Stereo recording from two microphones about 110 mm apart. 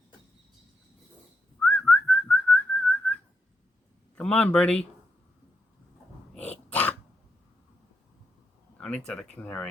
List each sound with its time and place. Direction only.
1.5 s whistling: 15° left (ahead or behind)
4.1 s speech: 10° left (ahead or behind)
6.3 s dog: 10° left (ahead or behind)
8.8 s speech: 10° left (ahead or behind)